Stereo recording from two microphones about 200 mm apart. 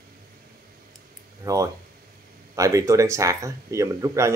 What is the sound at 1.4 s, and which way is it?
Speech, 15° right (ahead or behind).